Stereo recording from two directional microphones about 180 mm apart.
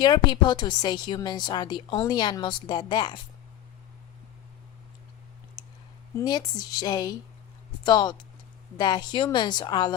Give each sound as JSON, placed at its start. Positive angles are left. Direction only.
{"t": 0.0, "sound": "a woman's voice", "side_deg": 25}
{"t": 6.1, "sound": "a woman's voice", "side_deg": 20}